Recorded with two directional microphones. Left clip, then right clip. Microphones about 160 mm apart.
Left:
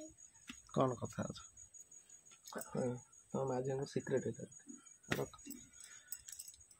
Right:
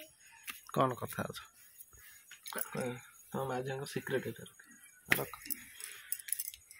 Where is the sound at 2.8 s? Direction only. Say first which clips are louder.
Right 1 dB; 15° right (ahead or behind).